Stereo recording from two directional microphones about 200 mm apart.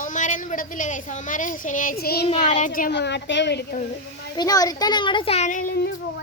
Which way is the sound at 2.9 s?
55° left (ahead or behind).